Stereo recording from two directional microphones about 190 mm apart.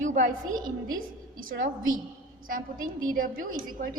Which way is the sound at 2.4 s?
45° right (ahead or behind).